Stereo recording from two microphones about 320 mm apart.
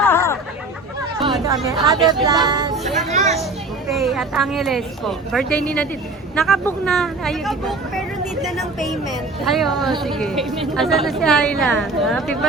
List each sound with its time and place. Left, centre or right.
0.0 s chatter: centre
1.6 s speech: centre
2.8 s a sound: right
3.9 s a woman's voice: centre